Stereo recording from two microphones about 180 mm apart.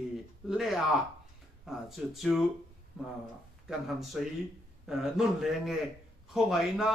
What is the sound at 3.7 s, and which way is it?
Speech, centre (ahead or behind).